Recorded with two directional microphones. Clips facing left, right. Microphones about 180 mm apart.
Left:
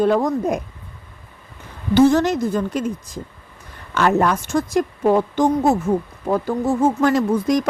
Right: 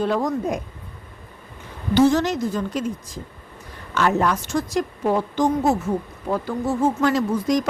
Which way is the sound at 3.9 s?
50° left (ahead or behind).